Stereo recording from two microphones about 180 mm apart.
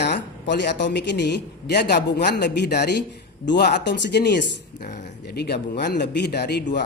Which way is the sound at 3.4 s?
75° left (ahead or behind).